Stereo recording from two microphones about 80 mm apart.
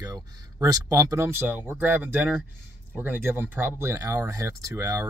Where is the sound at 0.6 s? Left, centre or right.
Right.